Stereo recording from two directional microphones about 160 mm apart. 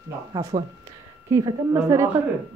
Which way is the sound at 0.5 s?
40° right (ahead or behind).